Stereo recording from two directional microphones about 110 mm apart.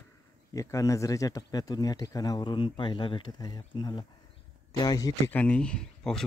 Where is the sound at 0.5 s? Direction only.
30° left (ahead or behind).